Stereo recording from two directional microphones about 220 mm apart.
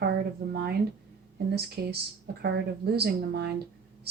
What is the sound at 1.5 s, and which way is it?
Speech, 45° right (ahead or behind).